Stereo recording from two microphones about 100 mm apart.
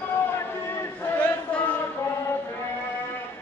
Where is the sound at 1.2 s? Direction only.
15° left (ahead or behind).